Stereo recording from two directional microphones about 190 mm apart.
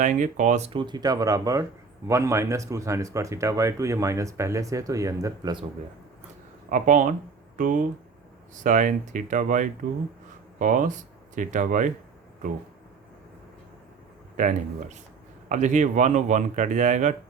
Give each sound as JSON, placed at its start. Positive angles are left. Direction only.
{"t": 0.0, "sound": "speech", "side_deg": -40}
{"t": 6.7, "sound": "speech", "side_deg": -40}
{"t": 14.3, "sound": "speech", "side_deg": -40}